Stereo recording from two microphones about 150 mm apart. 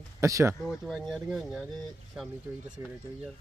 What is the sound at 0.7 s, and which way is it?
Speech, centre (ahead or behind).